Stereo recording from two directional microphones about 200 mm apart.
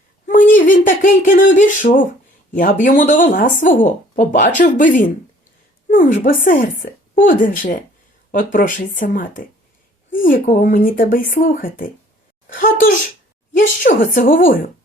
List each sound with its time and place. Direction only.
0.3 s a woman's voice: 40° left (ahead or behind)